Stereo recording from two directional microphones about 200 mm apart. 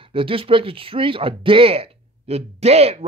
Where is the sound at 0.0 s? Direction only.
25° right (ahead or behind).